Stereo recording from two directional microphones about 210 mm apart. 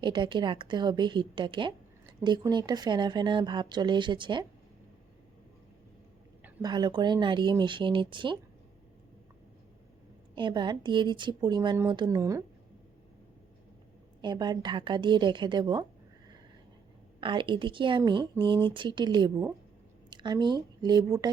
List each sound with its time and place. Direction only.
0.0 s speech: 20° right (ahead or behind)
6.4 s speech: 20° right (ahead or behind)
10.3 s speech: 20° right (ahead or behind)
14.2 s speech: 20° right (ahead or behind)
17.2 s a woman's voice: 25° right (ahead or behind)